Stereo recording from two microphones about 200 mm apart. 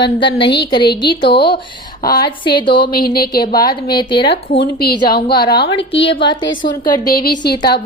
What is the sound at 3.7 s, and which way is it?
Speech, 20° left (ahead or behind).